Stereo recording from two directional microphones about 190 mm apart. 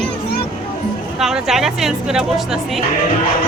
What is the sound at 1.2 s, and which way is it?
Speech, centre (ahead or behind).